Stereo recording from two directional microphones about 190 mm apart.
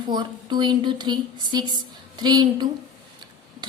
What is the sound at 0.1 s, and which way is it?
Speech, 25° right (ahead or behind).